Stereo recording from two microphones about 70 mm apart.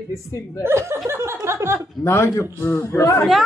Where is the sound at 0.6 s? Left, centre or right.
Right.